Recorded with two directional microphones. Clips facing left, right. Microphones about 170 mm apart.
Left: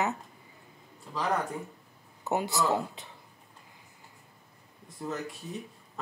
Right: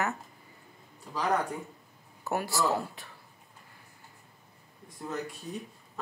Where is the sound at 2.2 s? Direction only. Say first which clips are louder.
Left 1 dB; 20° left (ahead or behind).